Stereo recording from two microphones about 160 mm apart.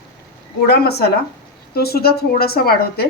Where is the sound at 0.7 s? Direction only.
85° left.